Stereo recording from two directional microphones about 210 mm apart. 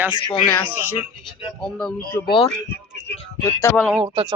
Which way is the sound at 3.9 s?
25° right (ahead or behind).